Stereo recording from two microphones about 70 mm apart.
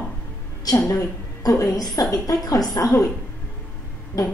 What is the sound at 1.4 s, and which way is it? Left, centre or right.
A woman's voice, left.